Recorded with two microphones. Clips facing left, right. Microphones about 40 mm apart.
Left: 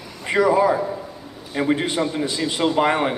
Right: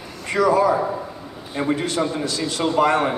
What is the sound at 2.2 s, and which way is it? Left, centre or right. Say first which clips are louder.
Speech: left 1 dB; left.